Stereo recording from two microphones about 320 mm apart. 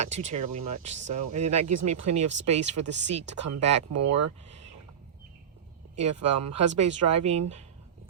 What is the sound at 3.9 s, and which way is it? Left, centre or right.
Speech, right.